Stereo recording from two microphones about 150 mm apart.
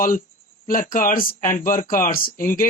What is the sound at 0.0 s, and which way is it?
A woman's voice, 65° left (ahead or behind).